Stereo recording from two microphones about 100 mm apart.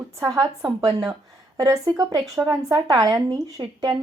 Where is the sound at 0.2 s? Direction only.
35° right (ahead or behind).